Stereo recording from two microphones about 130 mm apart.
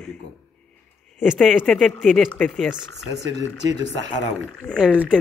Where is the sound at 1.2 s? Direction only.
5° right (ahead or behind).